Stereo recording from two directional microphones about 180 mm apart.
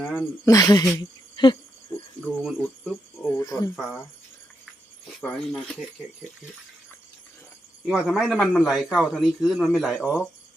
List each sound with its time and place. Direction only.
0.2 s speech: 20° left (ahead or behind)
2.2 s speech: centre (ahead or behind); by 3.7 s 20° left (ahead or behind)
3.8 s a man's voice: centre (ahead or behind)
5.2 s a man's voice: centre (ahead or behind)
7.9 s a man's voice: centre (ahead or behind)